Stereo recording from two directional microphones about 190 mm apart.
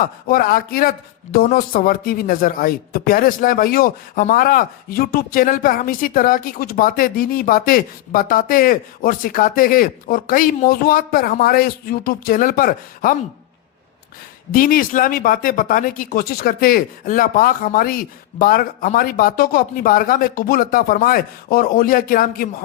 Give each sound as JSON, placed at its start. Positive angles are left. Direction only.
{"t": 0.0, "sound": "speech", "side_deg": 50}
{"t": 14.5, "sound": "speech", "side_deg": 45}